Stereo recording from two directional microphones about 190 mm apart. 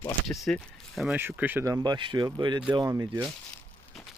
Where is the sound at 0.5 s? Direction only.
5° left (ahead or behind).